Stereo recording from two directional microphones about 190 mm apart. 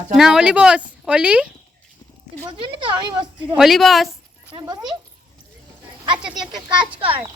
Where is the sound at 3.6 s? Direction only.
Centre (ahead or behind).